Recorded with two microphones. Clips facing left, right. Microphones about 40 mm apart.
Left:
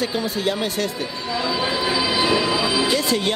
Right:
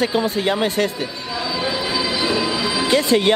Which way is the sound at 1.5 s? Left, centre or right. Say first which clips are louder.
Right 1 dB; centre.